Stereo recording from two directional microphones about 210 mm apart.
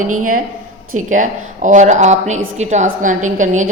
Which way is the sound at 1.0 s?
35° right (ahead or behind).